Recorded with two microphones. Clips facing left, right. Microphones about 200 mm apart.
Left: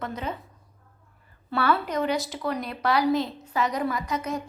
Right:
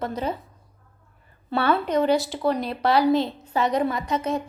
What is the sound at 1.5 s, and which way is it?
Speech, 25° right (ahead or behind).